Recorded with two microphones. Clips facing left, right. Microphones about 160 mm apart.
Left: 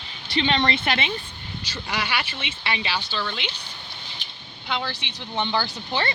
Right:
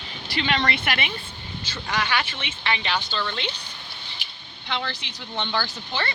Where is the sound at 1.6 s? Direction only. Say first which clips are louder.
Right 2 dB; 10° left (ahead or behind).